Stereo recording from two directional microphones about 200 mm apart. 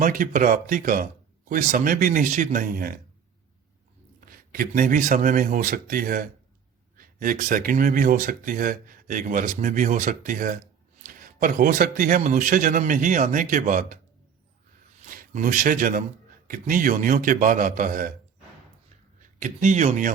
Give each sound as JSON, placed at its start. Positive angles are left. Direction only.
{"t": 0.0, "sound": "speech", "side_deg": -45}
{"t": 4.3, "sound": "a man's voice", "side_deg": -45}
{"t": 15.0, "sound": "a man's voice", "side_deg": -40}
{"t": 19.4, "sound": "a man's voice", "side_deg": -40}